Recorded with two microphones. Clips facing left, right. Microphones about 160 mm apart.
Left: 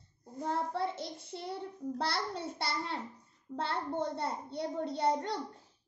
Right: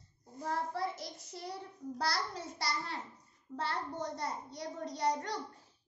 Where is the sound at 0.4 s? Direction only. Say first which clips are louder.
Left 3 dB; 25° left (ahead or behind).